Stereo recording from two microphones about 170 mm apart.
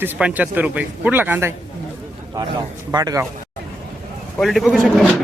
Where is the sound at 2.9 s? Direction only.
20° right (ahead or behind).